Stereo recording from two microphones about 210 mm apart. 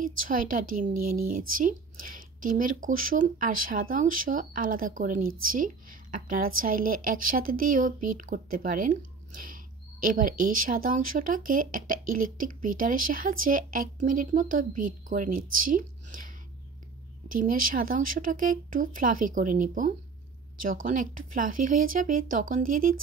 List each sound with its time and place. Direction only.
0.0 s speech: 40° right (ahead or behind)
17.4 s speech: 40° right (ahead or behind)